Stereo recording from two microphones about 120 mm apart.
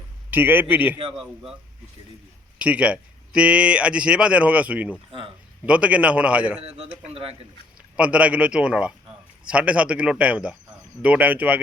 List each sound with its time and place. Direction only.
0.3 s a man's voice: 15° right (ahead or behind)
1.1 s a man's voice: 5° right (ahead or behind)
2.6 s a man's voice: 10° right (ahead or behind)
6.6 s a man's voice: 55° right (ahead or behind)
7.9 s a man's voice: 10° right (ahead or behind)